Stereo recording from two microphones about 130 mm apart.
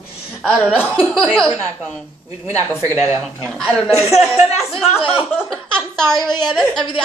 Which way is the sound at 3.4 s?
5° left (ahead or behind).